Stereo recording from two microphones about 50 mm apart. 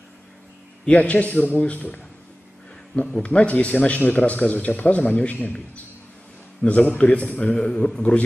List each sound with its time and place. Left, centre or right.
0.8 s a man's voice: left
6.6 s a man's voice: left